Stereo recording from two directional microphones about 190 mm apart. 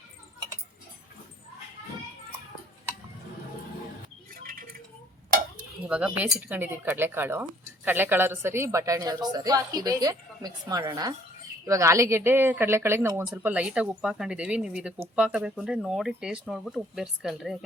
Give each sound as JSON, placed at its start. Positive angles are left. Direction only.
{"t": 5.9, "sound": "a woman's voice", "side_deg": -5}